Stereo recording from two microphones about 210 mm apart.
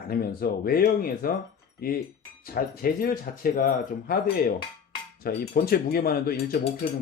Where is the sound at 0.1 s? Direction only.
45° left (ahead or behind).